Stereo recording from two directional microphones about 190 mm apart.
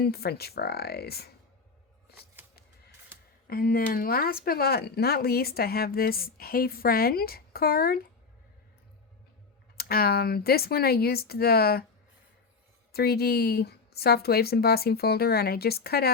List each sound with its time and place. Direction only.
0.0 s a woman's voice: 55° left (ahead or behind)
3.4 s speech: 55° left (ahead or behind)
9.7 s a woman's voice: 55° left (ahead or behind)
12.9 s a woman's voice: 55° left (ahead or behind)